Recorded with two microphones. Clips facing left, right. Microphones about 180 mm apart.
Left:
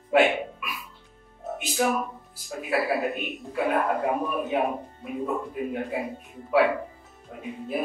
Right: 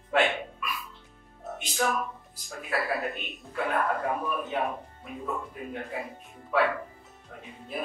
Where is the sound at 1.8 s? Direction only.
15° left (ahead or behind).